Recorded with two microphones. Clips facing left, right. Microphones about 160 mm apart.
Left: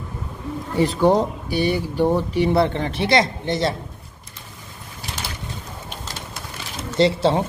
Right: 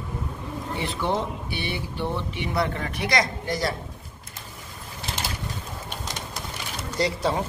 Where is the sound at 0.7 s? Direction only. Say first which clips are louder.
Left 10 dB; 40° left (ahead or behind); by 3.7 s 25° left (ahead or behind).